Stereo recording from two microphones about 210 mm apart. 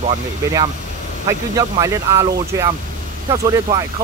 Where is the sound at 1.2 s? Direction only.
15° right (ahead or behind).